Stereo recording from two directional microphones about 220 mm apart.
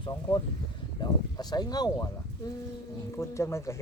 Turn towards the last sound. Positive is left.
turn(degrees=10)  # may be behind; listen again after turning